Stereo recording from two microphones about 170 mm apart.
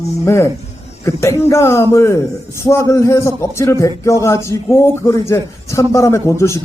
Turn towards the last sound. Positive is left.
turn(degrees=15)  # may be behind; listen again after turning